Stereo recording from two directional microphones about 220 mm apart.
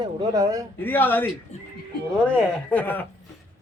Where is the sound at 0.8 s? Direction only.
10° left (ahead or behind).